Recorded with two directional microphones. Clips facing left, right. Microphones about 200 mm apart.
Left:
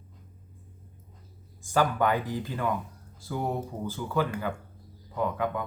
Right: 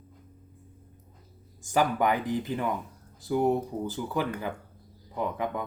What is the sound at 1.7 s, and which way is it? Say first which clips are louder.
Speech: even; 15° right (ahead or behind).